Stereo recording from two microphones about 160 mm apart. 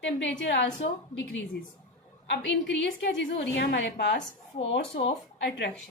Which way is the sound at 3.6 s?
90° left.